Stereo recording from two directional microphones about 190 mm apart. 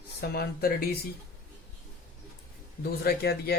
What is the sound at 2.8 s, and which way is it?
Speech, 55° left (ahead or behind).